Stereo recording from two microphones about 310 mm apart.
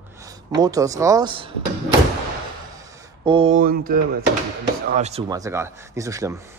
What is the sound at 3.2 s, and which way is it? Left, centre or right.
Speech, centre.